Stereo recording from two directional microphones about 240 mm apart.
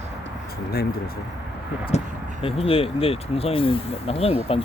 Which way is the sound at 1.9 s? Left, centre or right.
Left.